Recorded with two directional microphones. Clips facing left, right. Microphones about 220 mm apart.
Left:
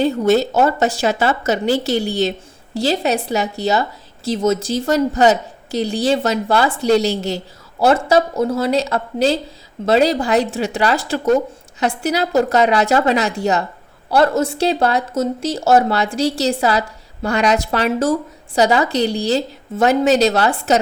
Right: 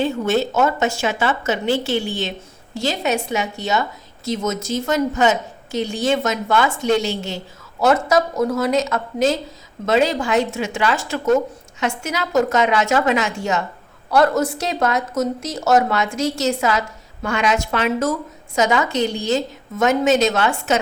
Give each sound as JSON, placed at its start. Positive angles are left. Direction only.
{"t": 0.0, "sound": "a woman's voice", "side_deg": 40}